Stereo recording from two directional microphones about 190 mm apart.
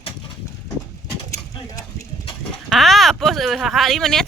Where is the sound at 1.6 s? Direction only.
20° left (ahead or behind).